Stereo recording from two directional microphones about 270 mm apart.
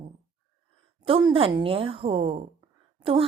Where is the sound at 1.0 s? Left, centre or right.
Centre.